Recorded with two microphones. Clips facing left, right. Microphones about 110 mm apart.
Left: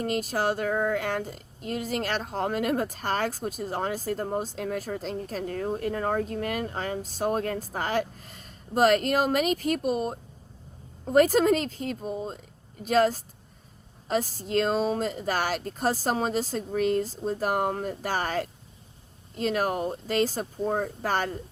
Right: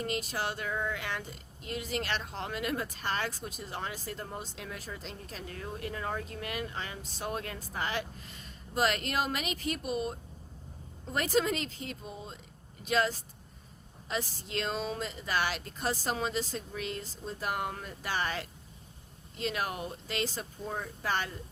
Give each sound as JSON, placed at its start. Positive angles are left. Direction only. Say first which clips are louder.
{"t": 0.0, "sound": "speech", "louder": "left 7 dB", "side_deg": 45}